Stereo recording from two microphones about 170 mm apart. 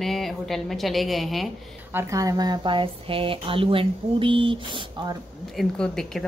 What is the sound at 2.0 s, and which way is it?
Speech, 20° right (ahead or behind).